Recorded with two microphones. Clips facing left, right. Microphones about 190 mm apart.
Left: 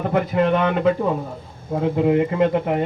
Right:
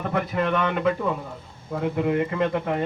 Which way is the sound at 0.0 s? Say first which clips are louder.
Left 6 dB; 25° left (ahead or behind).